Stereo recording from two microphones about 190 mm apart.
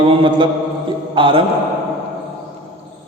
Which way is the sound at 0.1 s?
25° right (ahead or behind).